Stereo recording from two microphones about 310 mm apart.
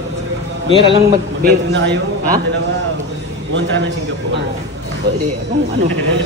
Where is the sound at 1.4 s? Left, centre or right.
Right.